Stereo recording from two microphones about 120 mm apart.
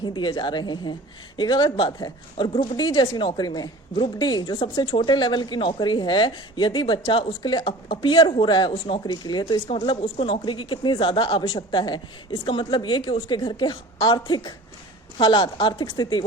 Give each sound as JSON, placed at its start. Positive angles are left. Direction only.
{"t": 0.0, "sound": "speech", "side_deg": 40}
{"t": 9.8, "sound": "a woman's voice", "side_deg": 50}